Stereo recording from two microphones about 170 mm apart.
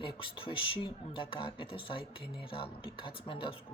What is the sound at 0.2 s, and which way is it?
Speech, 30° left (ahead or behind).